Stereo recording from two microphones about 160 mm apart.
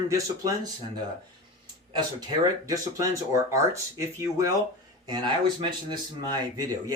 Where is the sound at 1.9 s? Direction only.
25° right (ahead or behind).